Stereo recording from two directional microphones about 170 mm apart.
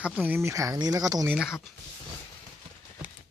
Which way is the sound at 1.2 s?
5° right (ahead or behind).